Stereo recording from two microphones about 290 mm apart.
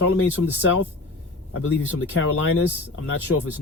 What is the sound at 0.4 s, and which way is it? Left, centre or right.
Speech, left.